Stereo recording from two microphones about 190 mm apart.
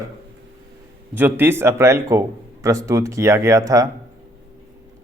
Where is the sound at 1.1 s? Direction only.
10° right (ahead or behind).